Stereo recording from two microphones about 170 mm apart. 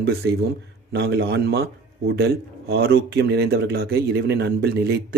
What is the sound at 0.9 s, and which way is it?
A man's voice, 90° right.